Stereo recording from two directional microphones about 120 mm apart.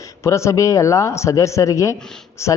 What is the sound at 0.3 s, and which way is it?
A man's voice, 25° left (ahead or behind).